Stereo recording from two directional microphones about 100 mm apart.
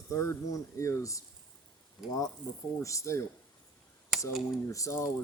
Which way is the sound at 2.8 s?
30° left (ahead or behind).